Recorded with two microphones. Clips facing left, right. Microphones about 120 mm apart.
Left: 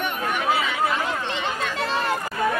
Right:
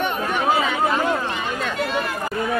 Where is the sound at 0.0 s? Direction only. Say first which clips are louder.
Right 3 dB; 35° right (ahead or behind).